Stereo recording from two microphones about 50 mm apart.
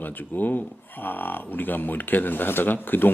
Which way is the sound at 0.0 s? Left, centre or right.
Left.